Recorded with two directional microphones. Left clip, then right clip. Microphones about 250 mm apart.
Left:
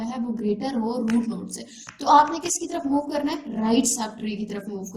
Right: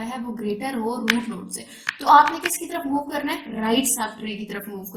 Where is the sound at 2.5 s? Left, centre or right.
Right.